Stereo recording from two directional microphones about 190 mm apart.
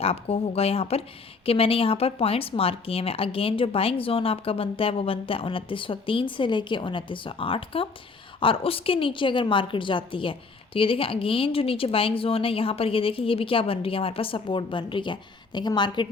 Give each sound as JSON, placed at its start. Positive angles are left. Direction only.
{"t": 0.0, "sound": "speech", "side_deg": 30}